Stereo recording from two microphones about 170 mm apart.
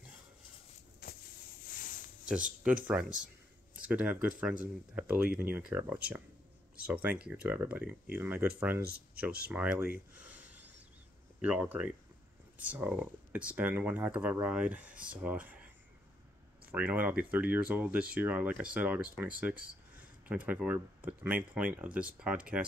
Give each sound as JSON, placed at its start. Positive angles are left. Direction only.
{"t": 1.0, "sound": "vehicle", "side_deg": 65}
{"t": 1.7, "sound": "a sound", "side_deg": 55}
{"t": 2.6, "sound": "speech", "side_deg": -5}
{"t": 9.8, "sound": "a sound", "side_deg": -10}
{"t": 11.4, "sound": "speech", "side_deg": -5}
{"t": 16.7, "sound": "speech", "side_deg": -10}